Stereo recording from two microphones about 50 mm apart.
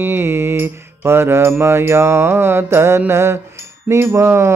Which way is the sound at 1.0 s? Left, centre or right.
Right.